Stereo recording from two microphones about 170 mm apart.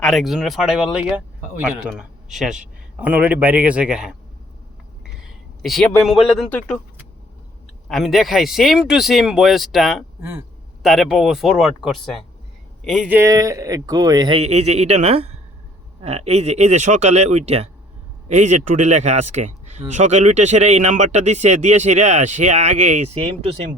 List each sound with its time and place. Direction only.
0.0 s a man's voice: centre (ahead or behind)
7.9 s a man's voice: centre (ahead or behind)
10.2 s speech: 15° right (ahead or behind)
10.8 s a man's voice: centre (ahead or behind)
13.1 s speech: 10° right (ahead or behind); by 23.6 s 35° right (ahead or behind)